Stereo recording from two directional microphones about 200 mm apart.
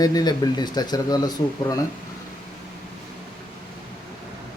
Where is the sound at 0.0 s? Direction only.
20° left (ahead or behind).